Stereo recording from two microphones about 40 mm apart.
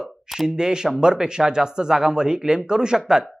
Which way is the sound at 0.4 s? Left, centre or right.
Centre.